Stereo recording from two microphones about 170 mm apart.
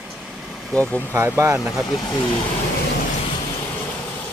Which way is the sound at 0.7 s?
5° left (ahead or behind).